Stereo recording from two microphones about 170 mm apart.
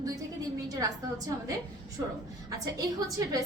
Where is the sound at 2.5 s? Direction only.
20° right (ahead or behind).